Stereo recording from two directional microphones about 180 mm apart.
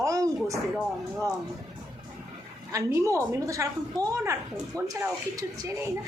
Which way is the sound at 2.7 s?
15° right (ahead or behind).